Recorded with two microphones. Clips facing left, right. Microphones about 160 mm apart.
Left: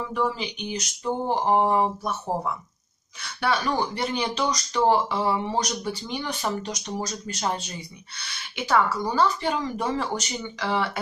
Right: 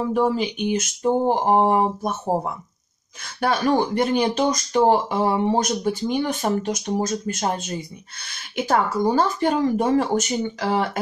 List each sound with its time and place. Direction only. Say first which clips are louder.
0.0 s speech: right 6 dB; 45° right (ahead or behind)
3.3 s speech: right 5 dB; 45° right (ahead or behind)